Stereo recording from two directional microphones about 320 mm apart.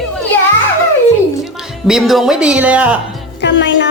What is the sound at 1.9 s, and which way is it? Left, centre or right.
Speech, centre.